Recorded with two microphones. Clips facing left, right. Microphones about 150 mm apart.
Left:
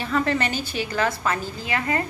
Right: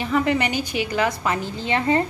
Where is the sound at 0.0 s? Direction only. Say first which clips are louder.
Right 2 dB; 15° right (ahead or behind).